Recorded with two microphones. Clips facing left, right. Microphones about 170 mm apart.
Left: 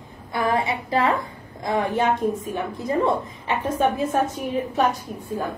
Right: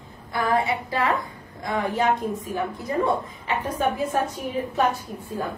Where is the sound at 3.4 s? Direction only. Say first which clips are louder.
Left 3 dB; 25° left (ahead or behind).